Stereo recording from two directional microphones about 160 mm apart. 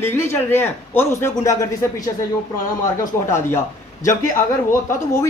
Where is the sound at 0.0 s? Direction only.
15° left (ahead or behind).